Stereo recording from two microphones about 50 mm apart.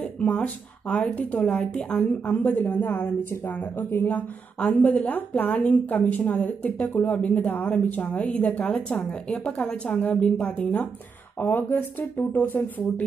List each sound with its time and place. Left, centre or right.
0.0 s a woman's voice: left
2.0 s speech: left
3.7 s speech: left
4.1 s a woman's voice: left
11.3 s speech: left